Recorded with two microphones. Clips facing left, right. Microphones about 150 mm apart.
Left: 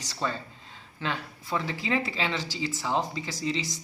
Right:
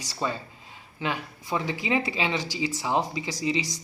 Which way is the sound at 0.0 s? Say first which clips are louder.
Right 2 dB; 10° right (ahead or behind).